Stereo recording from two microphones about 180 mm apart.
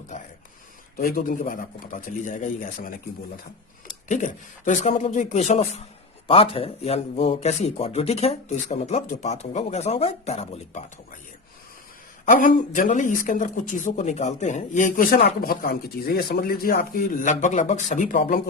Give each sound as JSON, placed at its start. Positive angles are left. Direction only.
{"t": 0.9, "sound": "speech", "side_deg": 50}
{"t": 4.1, "sound": "speech", "side_deg": 45}
{"t": 12.3, "sound": "speech", "side_deg": 50}